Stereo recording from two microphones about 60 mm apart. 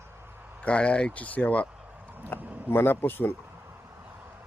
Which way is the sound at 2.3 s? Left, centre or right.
Left.